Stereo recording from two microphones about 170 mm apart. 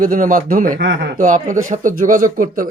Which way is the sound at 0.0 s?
55° right (ahead or behind).